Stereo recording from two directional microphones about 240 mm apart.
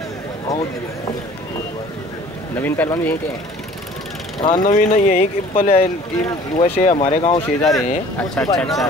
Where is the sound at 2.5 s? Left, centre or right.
Centre.